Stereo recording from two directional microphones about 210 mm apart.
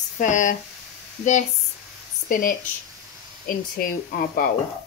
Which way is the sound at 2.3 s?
40° left (ahead or behind).